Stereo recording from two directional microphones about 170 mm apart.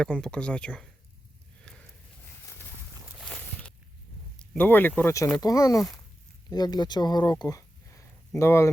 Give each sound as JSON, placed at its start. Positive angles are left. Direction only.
{"t": 0.0, "sound": "speech", "side_deg": 5}
{"t": 3.1, "sound": "boat", "side_deg": 0}
{"t": 4.4, "sound": "speech", "side_deg": 10}